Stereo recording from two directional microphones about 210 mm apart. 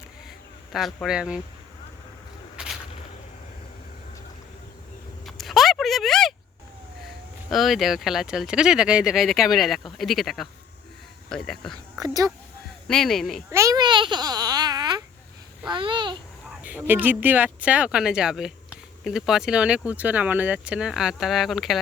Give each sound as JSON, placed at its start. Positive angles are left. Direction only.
{"t": 0.7, "sound": "a man's voice", "side_deg": 0}
{"t": 5.2, "sound": "a sound", "side_deg": 0}
{"t": 7.5, "sound": "speech", "side_deg": 0}
{"t": 11.9, "sound": "speech", "side_deg": -15}
{"t": 12.9, "sound": "speech", "side_deg": 0}
{"t": 13.5, "sound": "babbling", "side_deg": -15}
{"t": 15.7, "sound": "a child's voice", "side_deg": -20}
{"t": 16.6, "sound": "speech", "side_deg": -10}